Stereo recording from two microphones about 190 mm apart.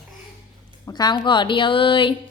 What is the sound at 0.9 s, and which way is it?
A woman's voice, 20° left (ahead or behind).